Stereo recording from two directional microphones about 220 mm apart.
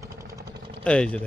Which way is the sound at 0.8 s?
5° left (ahead or behind).